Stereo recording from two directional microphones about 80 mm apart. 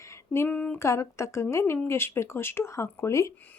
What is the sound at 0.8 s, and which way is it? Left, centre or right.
Speech, left.